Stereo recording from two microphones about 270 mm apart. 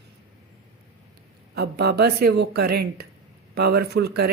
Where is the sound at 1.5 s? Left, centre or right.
Right.